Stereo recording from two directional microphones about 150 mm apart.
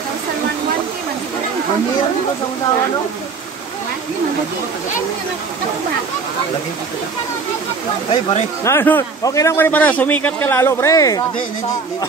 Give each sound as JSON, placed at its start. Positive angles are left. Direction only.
{"t": 8.1, "sound": "speech", "side_deg": 40}
{"t": 8.6, "sound": "a man's voice", "side_deg": 15}